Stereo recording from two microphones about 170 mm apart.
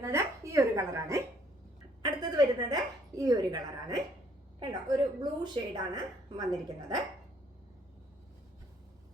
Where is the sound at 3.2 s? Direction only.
25° right (ahead or behind).